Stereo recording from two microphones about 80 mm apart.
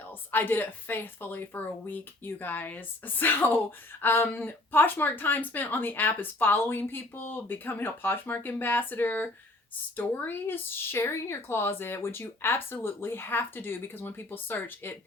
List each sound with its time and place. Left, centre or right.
0.1 s a woman's voice: left